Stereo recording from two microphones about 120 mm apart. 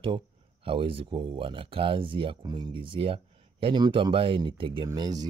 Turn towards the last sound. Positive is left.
turn(degrees=-35)  # may be behind; listen again after turning